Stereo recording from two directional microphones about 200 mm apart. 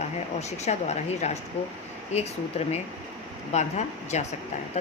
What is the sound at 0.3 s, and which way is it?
Speech, 35° left (ahead or behind).